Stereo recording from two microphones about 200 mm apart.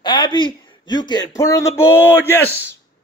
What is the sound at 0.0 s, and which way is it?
A man's voice, 25° left (ahead or behind).